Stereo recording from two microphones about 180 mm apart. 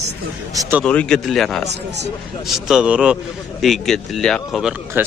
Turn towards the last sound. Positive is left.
turn(degrees=-10)  # may be behind; listen again after turning